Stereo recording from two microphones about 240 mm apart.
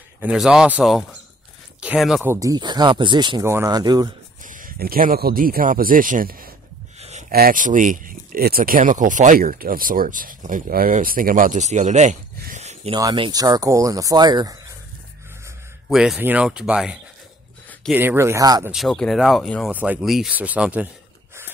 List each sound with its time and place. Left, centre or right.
0.2 s speech: centre
4.4 s speech: right; by 14.5 s centre
15.9 s speech: centre
18.7 s speech: centre